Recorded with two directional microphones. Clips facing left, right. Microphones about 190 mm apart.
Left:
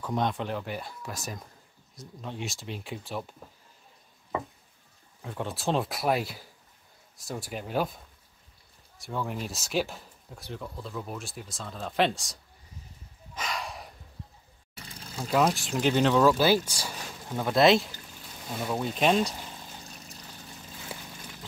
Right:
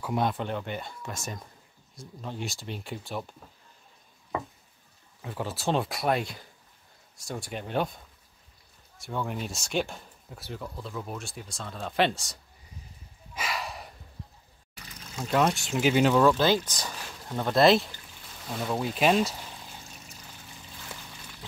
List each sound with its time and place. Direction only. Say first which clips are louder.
0.0 s speech: right 1 dB; 5° right (ahead or behind)
5.2 s speech: right 1 dB; centre (ahead or behind)
13.3 s a sound: right 1 dB; 5° right (ahead or behind)
14.9 s pour: even; 30° left (ahead or behind)
15.2 s speech: even; centre (ahead or behind)